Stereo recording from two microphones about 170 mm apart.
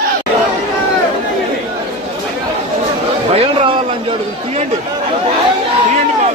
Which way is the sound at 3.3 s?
35° right (ahead or behind).